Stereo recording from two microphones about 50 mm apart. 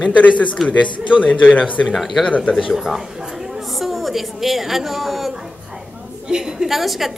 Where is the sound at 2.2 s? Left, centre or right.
Left.